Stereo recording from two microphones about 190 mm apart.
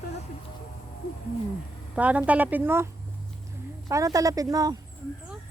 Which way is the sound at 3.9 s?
15° right (ahead or behind).